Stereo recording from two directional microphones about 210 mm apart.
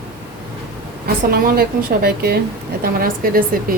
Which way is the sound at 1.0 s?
45° right (ahead or behind).